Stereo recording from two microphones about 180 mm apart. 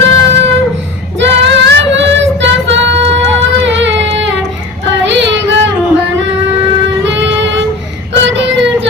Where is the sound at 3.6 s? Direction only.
85° right.